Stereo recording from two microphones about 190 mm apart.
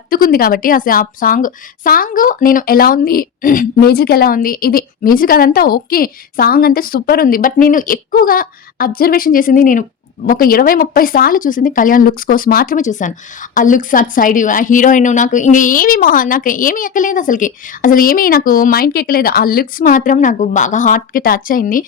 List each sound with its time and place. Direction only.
0.1 s speech: 50° left (ahead or behind)